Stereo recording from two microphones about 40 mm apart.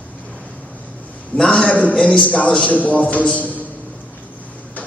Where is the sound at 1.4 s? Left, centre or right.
Centre.